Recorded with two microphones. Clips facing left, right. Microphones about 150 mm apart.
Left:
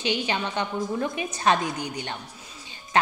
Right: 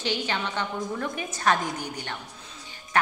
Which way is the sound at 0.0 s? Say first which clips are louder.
Left 2 dB; 15° left (ahead or behind).